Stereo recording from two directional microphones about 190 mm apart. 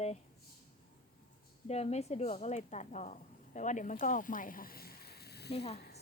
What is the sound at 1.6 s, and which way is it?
A woman's voice, 35° left (ahead or behind).